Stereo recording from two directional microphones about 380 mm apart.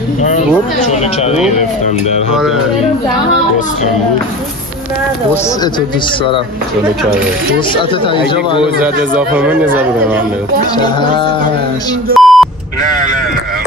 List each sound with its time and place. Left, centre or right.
0.2 s speech: centre
2.3 s speech: centre
5.3 s speech: centre
7.7 s speech: centre
9.1 s speech: centre
10.8 s speech: centre
12.2 s beep: centre